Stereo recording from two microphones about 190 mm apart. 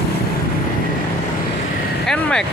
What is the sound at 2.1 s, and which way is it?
Speech, 5° left (ahead or behind).